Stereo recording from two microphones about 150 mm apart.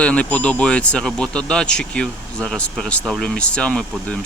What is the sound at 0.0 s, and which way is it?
Speech, 10° left (ahead or behind).